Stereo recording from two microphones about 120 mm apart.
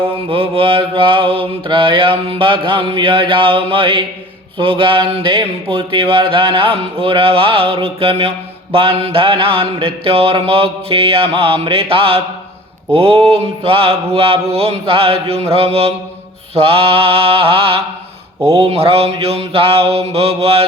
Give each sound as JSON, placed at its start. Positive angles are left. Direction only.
{"t": 0.3, "sound": "speech", "side_deg": -50}
{"t": 13.7, "sound": "mantra", "side_deg": -50}
{"t": 16.6, "sound": "speech", "side_deg": -55}
{"t": 18.5, "sound": "mantra", "side_deg": -55}